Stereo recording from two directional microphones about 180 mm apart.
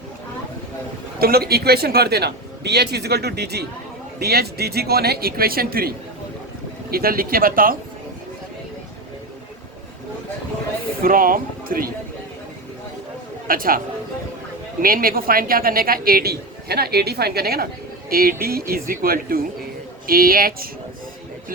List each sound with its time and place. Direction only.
1.2 s speech: 60° right (ahead or behind)
6.9 s speech: 55° right (ahead or behind)
11.0 s speech: 50° right (ahead or behind)
13.5 s speech: 50° right (ahead or behind)